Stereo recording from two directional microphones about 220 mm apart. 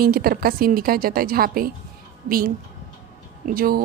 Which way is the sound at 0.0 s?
40° right (ahead or behind).